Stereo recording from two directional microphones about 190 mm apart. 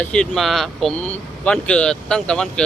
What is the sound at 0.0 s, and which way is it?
Speech, 5° left (ahead or behind).